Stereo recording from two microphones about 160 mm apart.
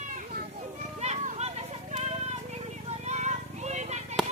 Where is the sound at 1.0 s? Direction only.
45° right (ahead or behind).